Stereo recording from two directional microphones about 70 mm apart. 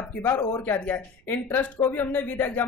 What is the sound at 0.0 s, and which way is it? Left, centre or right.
A woman's voice, left.